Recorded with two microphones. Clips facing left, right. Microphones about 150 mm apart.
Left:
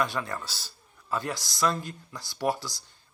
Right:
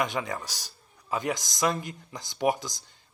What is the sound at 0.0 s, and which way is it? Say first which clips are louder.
A man's voice: even; 20° right (ahead or behind).